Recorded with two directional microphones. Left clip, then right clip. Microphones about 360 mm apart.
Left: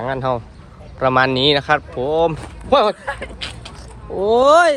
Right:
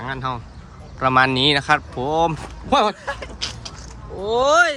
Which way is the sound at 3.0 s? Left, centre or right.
Centre.